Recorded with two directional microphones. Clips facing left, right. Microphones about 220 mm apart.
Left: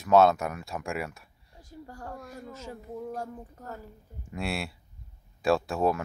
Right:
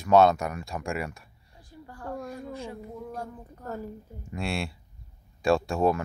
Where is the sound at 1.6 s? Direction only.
45° left (ahead or behind).